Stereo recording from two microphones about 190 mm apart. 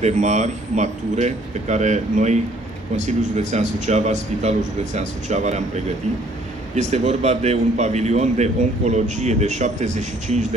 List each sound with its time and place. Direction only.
0.0 s a man's voice: 40° right (ahead or behind)
6.7 s a man's voice: 40° right (ahead or behind)